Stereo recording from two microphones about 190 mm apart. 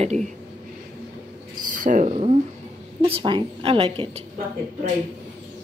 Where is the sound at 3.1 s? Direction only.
25° right (ahead or behind).